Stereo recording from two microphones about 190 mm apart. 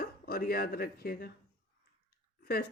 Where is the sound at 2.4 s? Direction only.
55° left (ahead or behind).